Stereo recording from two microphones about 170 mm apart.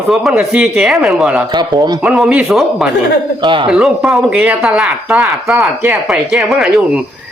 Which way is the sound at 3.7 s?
5° right (ahead or behind).